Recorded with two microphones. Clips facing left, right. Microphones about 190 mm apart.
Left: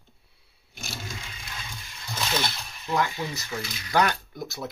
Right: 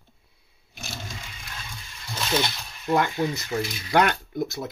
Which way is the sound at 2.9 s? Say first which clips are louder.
Right 4 dB; 55° right (ahead or behind).